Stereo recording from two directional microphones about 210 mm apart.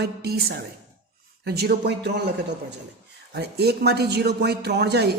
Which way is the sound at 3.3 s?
50° right (ahead or behind).